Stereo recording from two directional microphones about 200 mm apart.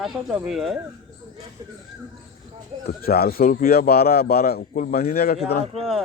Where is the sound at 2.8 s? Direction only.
50° left (ahead or behind).